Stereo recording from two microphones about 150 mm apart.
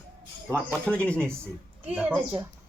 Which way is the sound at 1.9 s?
10° right (ahead or behind).